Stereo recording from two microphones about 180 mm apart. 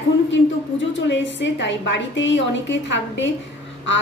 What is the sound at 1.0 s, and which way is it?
A woman's voice, 80° left.